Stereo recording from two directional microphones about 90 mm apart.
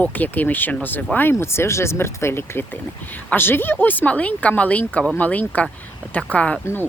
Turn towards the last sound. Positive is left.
turn(degrees=15)  # may be behind; listen again after turning